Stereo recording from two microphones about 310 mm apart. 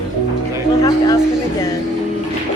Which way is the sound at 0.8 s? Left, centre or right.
Centre.